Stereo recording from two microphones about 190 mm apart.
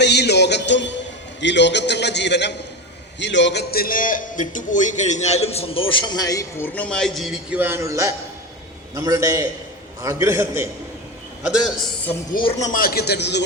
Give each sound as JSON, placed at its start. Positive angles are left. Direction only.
{"t": 0.0, "sound": "music", "side_deg": 60}
{"t": 1.4, "sound": "a man's voice", "side_deg": 65}
{"t": 6.7, "sound": "a man's voice", "side_deg": 5}
{"t": 12.3, "sound": "a man's voice", "side_deg": 25}